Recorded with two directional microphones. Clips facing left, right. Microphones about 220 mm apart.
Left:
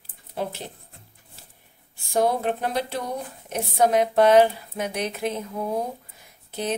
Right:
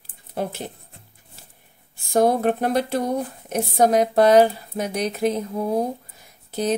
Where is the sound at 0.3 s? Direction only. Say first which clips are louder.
Right 2 dB; 50° right (ahead or behind).